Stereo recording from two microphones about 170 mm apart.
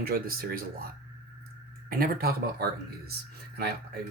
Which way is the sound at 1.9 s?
60° right (ahead or behind).